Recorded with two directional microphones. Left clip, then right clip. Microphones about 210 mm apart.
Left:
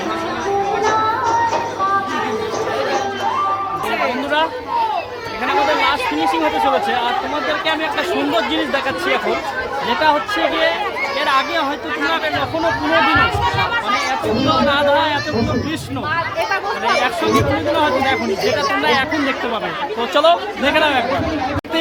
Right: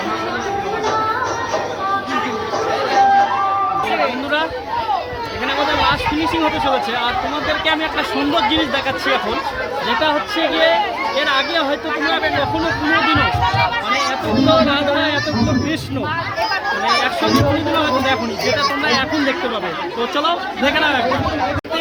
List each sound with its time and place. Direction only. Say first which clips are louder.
11.3 s speech: left 2 dB; 10° left (ahead or behind)
14.7 s speech: left 2 dB; 10° left (ahead or behind)
17.7 s speech: left 2 dB; 10° left (ahead or behind)
20.1 s speech: left 6 dB; 15° left (ahead or behind)